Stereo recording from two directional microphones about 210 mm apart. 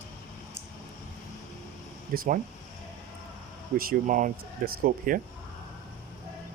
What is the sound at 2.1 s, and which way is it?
Speech, 40° right (ahead or behind).